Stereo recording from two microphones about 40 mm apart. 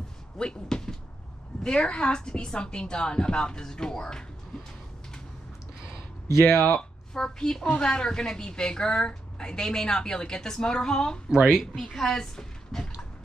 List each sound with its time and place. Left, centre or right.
0.4 s a sound: centre
1.6 s a woman's voice: centre
6.4 s speech: centre
6.8 s a woman's voice: centre
11.2 s speech: centre
11.8 s speech: centre